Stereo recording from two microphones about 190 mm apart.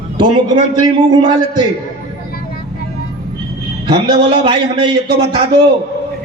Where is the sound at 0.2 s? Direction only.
25° right (ahead or behind).